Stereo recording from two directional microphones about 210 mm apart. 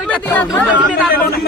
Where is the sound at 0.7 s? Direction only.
5° right (ahead or behind).